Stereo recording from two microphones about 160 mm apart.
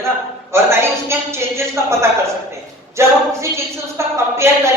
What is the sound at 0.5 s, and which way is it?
A woman's voice, 15° right (ahead or behind).